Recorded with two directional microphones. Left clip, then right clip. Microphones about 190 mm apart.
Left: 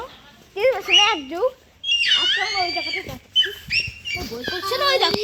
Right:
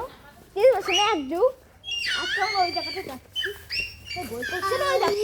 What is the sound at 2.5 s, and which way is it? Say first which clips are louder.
Speech: left 2 dB; 35° left (ahead or behind).